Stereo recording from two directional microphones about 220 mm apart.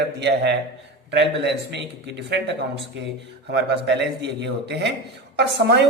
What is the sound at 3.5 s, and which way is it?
Speech, 50° right (ahead or behind).